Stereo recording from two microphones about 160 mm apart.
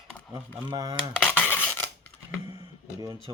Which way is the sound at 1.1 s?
10° left (ahead or behind).